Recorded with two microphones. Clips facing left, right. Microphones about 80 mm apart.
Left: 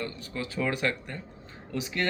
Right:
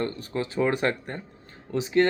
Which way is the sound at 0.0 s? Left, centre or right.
Right.